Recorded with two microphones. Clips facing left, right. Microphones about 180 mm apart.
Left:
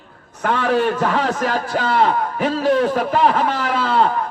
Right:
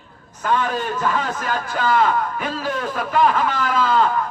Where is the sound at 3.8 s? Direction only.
40° left (ahead or behind).